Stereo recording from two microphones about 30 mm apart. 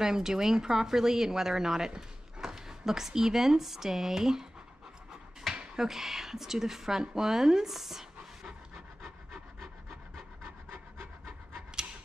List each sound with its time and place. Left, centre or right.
0.0 s speech: centre
5.8 s speech: centre
7.7 s a sound: centre
8.7 s rub: centre